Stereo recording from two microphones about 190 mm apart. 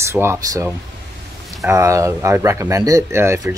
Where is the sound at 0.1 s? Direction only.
15° right (ahead or behind).